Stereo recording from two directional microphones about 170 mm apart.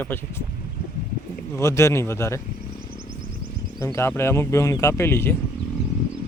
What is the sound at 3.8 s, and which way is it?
Speech, 15° left (ahead or behind).